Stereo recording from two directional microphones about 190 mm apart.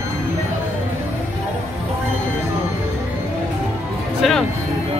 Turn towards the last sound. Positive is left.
turn(degrees=0)  # may be behind; listen again after turning